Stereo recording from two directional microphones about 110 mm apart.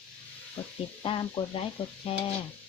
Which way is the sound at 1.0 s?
55° left (ahead or behind).